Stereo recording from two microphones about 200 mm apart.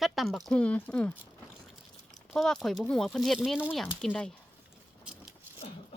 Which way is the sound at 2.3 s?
Centre (ahead or behind).